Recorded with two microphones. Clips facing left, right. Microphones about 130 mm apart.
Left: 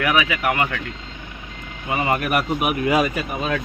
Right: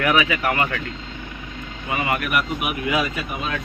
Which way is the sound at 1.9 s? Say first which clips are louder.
Left 2 dB; 30° left (ahead or behind).